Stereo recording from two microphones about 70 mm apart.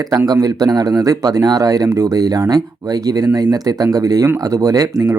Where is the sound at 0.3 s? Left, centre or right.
Right.